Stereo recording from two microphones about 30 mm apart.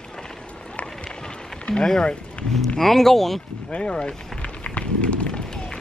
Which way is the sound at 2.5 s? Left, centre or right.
Centre.